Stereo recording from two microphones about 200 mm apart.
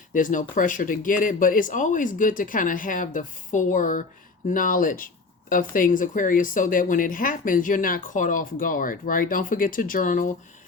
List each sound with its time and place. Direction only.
0.1 s speech: 40° left (ahead or behind)